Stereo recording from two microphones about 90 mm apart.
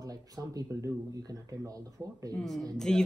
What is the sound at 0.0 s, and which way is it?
Speech, 45° right (ahead or behind).